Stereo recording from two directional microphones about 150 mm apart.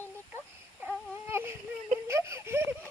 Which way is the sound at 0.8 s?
15° right (ahead or behind).